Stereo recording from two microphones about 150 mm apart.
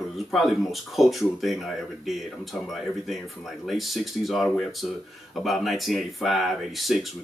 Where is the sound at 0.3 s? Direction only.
Centre (ahead or behind).